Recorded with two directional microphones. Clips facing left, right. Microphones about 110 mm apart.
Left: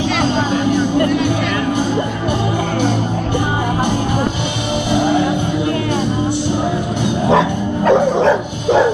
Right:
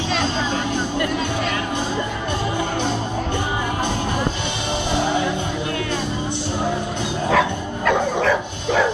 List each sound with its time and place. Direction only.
7.2 s dog: 30° left (ahead or behind)